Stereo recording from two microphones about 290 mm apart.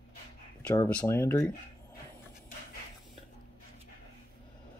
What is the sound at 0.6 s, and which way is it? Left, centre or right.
Speech, centre.